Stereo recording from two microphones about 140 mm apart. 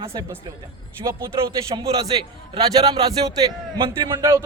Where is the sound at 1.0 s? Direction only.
40° right (ahead or behind).